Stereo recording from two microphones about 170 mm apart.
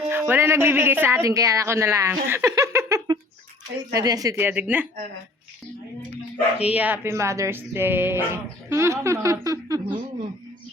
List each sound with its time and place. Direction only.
0.1 s speech: 15° right (ahead or behind)
6.6 s speech: 5° right (ahead or behind); by 10.2 s 25° right (ahead or behind)